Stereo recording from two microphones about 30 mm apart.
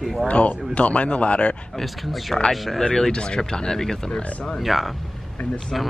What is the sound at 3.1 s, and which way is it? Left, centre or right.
Speech, left.